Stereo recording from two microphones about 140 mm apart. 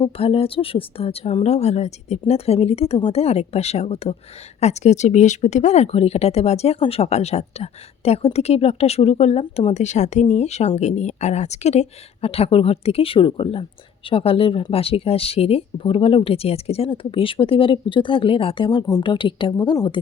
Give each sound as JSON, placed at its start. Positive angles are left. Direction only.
{"t": 0.0, "sound": "speech", "side_deg": 45}